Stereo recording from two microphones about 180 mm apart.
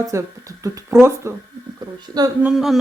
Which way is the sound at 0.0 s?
15° right (ahead or behind).